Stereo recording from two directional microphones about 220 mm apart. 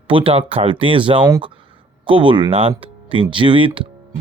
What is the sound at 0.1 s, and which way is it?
Speech, 25° right (ahead or behind).